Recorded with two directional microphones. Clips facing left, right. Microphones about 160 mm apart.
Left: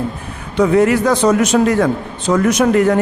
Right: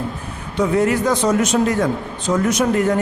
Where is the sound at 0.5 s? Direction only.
75° left (ahead or behind).